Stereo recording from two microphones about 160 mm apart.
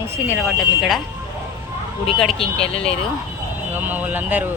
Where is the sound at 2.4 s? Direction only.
35° left (ahead or behind).